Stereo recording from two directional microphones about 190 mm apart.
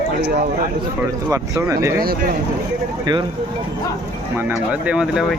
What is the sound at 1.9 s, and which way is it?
Speech, 50° right (ahead or behind).